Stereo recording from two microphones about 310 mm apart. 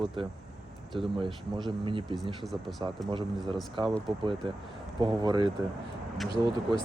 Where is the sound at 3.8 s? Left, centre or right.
Centre.